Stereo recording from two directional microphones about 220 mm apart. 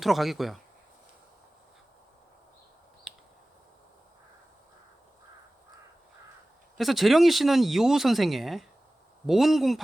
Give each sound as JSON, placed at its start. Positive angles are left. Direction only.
{"t": 0.0, "sound": "speech", "side_deg": 0}
{"t": 3.1, "sound": "a sound", "side_deg": 0}
{"t": 6.7, "sound": "speech", "side_deg": 0}